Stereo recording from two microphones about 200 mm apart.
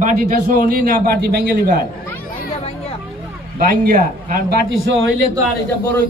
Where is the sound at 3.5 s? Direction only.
45° right (ahead or behind).